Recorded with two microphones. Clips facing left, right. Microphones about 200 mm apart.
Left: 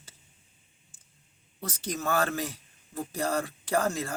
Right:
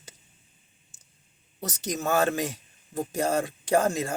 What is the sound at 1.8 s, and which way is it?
Speech, 20° right (ahead or behind).